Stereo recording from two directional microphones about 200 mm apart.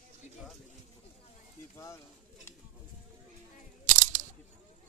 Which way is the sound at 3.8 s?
40° right (ahead or behind).